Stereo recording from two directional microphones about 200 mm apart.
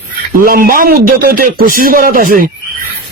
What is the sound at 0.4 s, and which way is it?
Speech, 45° right (ahead or behind).